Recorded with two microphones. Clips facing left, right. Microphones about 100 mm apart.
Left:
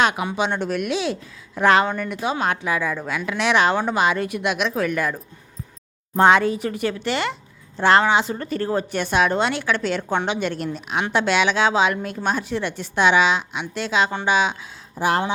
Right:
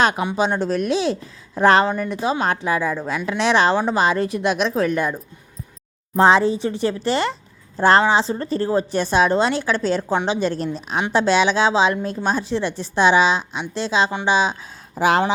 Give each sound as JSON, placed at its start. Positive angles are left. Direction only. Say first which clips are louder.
{"t": 0.0, "sound": "a woman's voice", "louder": "right 2 dB", "side_deg": -35}
{"t": 14.9, "sound": "speech", "louder": "right 4 dB", "side_deg": -90}